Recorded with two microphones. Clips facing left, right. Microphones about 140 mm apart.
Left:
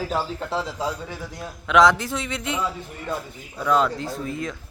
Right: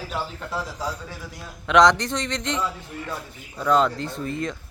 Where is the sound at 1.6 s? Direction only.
5° left (ahead or behind).